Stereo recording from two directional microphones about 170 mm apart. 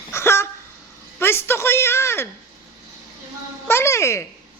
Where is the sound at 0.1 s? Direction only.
15° left (ahead or behind).